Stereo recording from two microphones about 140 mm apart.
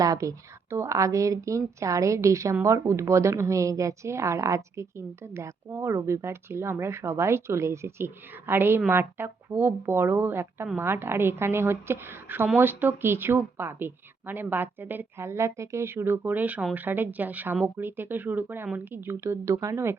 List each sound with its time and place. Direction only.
0.0 s a woman's voice: 25° right (ahead or behind)